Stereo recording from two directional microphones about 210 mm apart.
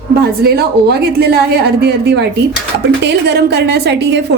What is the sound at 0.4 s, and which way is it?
A woman's voice, 50° right (ahead or behind).